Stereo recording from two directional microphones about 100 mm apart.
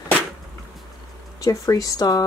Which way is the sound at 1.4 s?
35° left (ahead or behind).